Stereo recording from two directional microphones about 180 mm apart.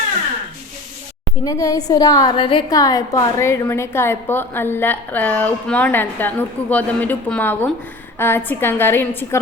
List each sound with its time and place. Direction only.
1.5 s a woman's voice: 20° left (ahead or behind)